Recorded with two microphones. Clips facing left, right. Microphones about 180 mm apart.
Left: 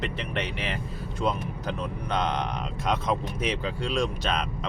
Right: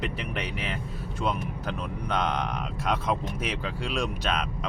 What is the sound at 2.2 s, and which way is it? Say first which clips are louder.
Speech: even; 10° right (ahead or behind).